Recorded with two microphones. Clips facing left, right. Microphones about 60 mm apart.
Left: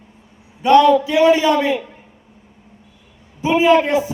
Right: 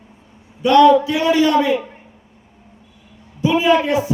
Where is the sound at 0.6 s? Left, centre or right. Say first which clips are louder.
Right 1 dB; left.